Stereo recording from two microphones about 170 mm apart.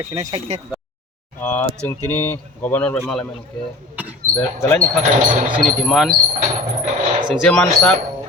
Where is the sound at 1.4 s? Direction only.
10° left (ahead or behind).